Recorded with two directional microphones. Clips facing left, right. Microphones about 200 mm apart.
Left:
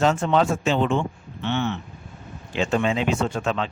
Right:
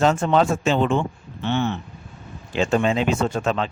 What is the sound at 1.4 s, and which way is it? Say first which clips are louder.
Speech: right 2 dB; 35° right (ahead or behind).